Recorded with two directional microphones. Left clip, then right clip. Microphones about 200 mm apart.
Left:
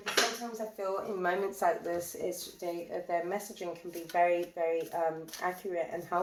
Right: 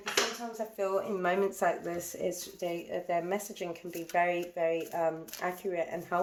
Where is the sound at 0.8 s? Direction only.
55° right (ahead or behind).